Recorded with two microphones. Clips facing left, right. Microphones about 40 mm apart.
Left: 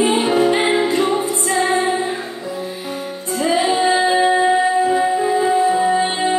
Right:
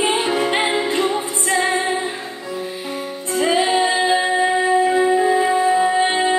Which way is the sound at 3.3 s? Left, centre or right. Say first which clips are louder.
Even; centre.